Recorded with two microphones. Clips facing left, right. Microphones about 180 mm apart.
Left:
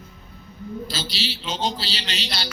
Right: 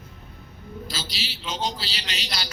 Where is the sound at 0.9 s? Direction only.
30° left (ahead or behind).